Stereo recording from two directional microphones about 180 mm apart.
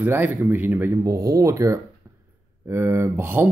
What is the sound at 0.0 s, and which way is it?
Speech, 10° right (ahead or behind).